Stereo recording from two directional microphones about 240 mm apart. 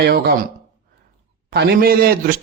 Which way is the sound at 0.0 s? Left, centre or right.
Right.